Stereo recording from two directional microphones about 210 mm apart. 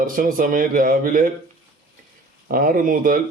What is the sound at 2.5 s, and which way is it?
Speech, 40° right (ahead or behind).